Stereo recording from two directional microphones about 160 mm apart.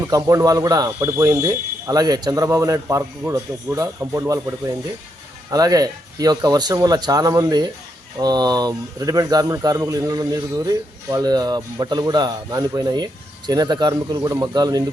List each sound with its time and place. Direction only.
0.0 s speech: 20° right (ahead or behind)